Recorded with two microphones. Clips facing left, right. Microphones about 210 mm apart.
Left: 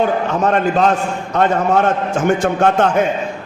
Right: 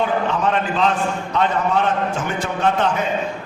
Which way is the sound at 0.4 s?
45° left (ahead or behind).